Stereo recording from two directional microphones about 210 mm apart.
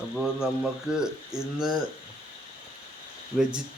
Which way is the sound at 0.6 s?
5° right (ahead or behind).